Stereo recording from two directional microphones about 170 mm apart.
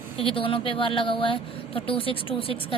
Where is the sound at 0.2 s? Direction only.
30° left (ahead or behind).